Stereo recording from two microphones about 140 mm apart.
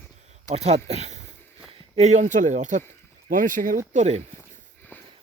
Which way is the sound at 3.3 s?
70° right (ahead or behind).